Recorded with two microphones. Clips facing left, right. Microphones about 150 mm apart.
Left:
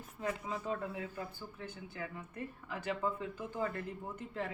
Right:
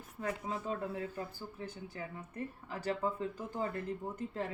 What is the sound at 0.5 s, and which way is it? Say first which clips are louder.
Speech: right 1 dB; 45° right (ahead or behind).